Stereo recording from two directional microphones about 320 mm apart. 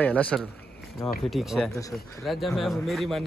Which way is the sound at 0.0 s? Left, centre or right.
Centre.